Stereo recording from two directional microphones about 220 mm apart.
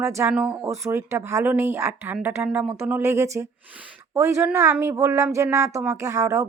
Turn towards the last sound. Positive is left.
turn(degrees=-15)  # may be behind; listen again after turning